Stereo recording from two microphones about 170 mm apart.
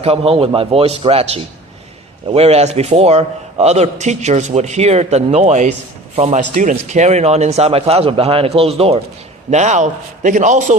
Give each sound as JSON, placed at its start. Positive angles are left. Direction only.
{"t": 0.0, "sound": "a man's voice", "side_deg": -35}